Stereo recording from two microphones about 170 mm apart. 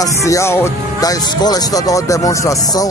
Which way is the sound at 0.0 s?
20° left (ahead or behind).